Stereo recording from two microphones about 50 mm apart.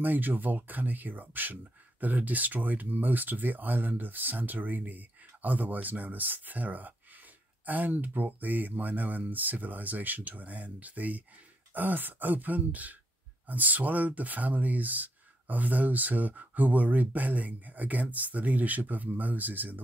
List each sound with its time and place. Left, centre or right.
0.0 s speech: right